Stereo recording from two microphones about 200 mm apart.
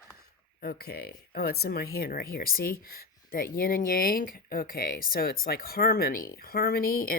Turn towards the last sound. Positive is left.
turn(degrees=45)  # may be behind; listen again after turning